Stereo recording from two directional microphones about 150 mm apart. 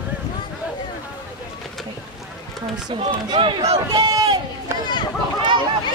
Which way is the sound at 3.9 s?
25° right (ahead or behind).